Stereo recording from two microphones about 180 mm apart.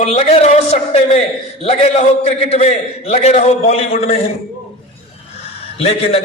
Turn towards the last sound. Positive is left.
turn(degrees=35)  # may be behind; listen again after turning